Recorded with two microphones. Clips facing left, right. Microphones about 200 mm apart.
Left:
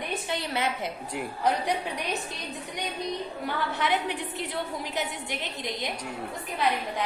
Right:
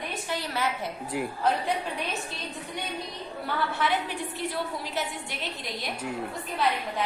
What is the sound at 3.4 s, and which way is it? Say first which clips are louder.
A woman's voice: right 1 dB; 20° left (ahead or behind).